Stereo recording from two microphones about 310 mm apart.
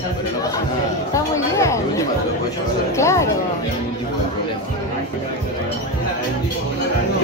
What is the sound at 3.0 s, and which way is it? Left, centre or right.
Speech, centre.